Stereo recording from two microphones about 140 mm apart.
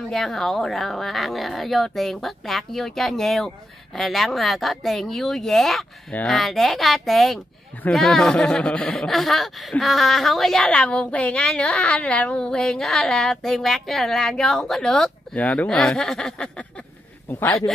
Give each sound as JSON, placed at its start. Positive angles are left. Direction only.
{"t": 0.1, "sound": "a man's voice", "side_deg": 0}